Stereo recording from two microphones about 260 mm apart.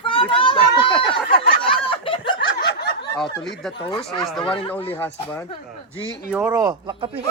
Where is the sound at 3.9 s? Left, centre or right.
Centre.